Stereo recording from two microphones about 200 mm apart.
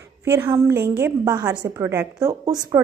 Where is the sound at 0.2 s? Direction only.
10° right (ahead or behind).